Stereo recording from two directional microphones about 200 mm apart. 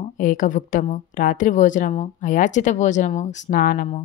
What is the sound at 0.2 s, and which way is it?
A woman's voice, 40° left (ahead or behind).